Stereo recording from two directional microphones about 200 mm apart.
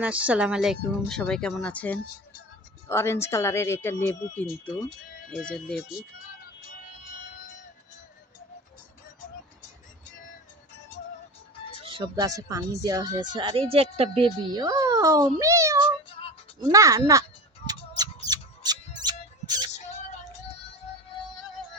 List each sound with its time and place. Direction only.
0.0 s speech: 5° right (ahead or behind)
11.9 s a woman's voice: 25° right (ahead or behind)
17.7 s a sound: 20° right (ahead or behind)